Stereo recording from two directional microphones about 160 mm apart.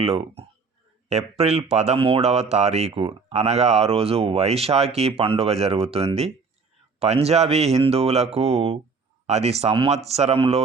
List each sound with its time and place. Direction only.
0.0 s speech: 40° right (ahead or behind)